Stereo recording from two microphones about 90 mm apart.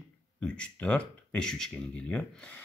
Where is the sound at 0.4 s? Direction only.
10° left (ahead or behind).